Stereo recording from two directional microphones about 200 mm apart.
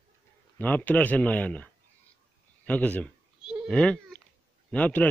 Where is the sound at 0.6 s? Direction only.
10° left (ahead or behind).